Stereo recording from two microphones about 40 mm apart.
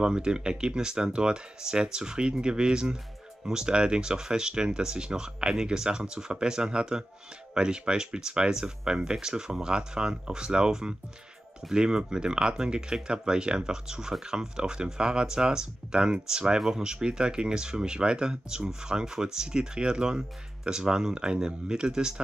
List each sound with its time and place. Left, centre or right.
0.0 s speech: right